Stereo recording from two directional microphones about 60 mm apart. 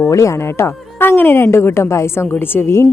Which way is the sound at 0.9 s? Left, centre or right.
Left.